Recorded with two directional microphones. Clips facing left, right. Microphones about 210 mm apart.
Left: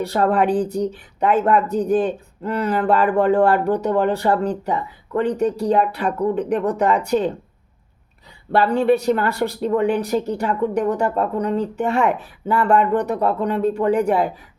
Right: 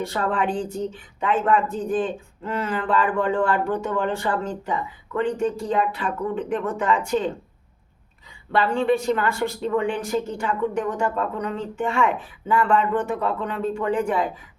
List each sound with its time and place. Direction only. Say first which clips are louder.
0.0 s speech: left 6 dB; 35° left (ahead or behind)
8.5 s speech: left 4 dB; 40° left (ahead or behind)